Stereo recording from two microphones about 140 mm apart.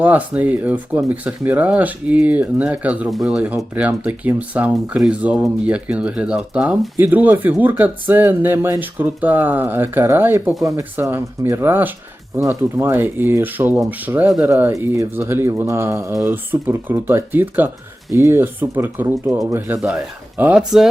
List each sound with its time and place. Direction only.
0.0 s speech: 10° right (ahead or behind)